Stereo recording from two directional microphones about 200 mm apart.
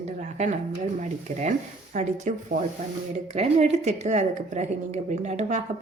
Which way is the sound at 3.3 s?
35° right (ahead or behind).